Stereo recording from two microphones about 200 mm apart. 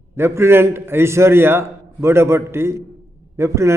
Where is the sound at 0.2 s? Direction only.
10° right (ahead or behind).